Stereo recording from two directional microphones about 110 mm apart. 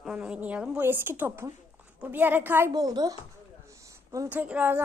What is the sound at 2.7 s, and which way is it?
Speech, 35° right (ahead or behind).